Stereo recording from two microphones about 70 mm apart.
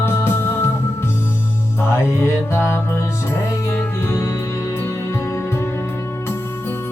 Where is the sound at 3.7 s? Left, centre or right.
Left.